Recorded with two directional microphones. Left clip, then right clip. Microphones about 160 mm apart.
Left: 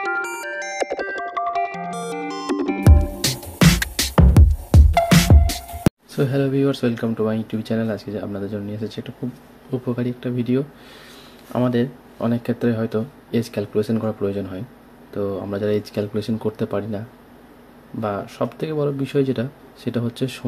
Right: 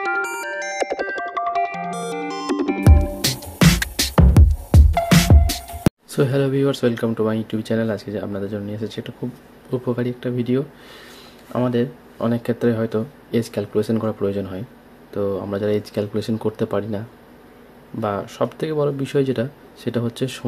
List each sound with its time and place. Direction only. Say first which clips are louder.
0.0 s music: right 1 dB; centre (ahead or behind)
6.1 s speech: right 2 dB; 25° right (ahead or behind)
18.0 s speech: right 2 dB; 15° right (ahead or behind)